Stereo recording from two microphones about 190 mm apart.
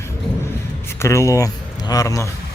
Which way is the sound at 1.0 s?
15° left (ahead or behind).